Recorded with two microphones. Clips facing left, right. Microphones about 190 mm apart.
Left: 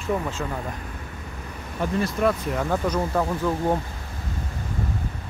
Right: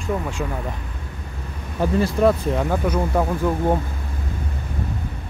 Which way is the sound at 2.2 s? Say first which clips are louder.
Right 5 dB; 30° right (ahead or behind).